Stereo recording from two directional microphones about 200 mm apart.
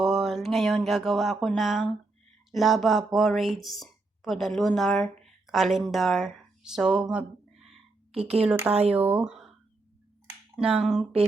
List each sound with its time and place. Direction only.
0.0 s a sound: centre (ahead or behind)
2.5 s speech: centre (ahead or behind)
8.1 s speech: 30° right (ahead or behind)
8.4 s speech: 10° right (ahead or behind)
10.6 s speech: 5° right (ahead or behind)